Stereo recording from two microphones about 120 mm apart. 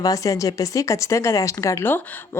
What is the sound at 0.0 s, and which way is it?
Speech, 30° left (ahead or behind).